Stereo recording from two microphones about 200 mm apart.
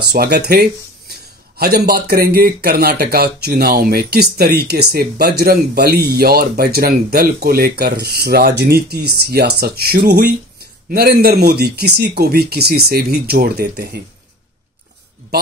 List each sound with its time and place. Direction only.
0.1 s speech: 50° right (ahead or behind)